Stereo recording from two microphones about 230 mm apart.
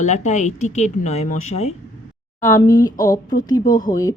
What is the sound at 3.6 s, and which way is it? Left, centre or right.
Speech, left.